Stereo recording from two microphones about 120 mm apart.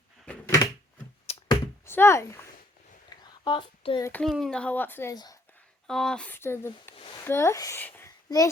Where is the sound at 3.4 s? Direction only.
45° left (ahead or behind).